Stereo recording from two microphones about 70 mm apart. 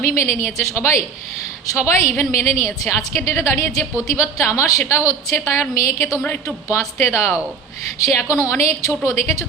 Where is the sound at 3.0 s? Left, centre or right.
Left.